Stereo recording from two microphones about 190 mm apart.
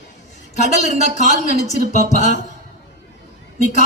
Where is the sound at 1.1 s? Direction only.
40° left (ahead or behind).